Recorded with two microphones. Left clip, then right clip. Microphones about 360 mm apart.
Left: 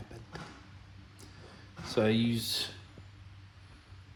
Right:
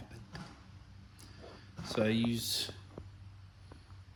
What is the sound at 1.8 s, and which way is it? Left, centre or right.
Speech, centre.